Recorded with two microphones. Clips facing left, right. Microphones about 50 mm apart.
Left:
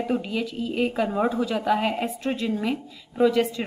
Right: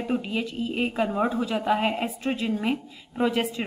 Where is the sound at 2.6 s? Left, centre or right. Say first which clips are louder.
Even; centre.